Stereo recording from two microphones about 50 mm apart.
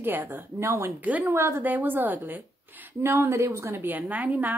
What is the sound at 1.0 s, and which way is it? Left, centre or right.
Speech, right.